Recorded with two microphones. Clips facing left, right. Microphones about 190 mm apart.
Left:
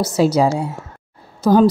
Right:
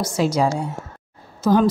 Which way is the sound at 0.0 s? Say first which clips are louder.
Left 4 dB; 30° left (ahead or behind).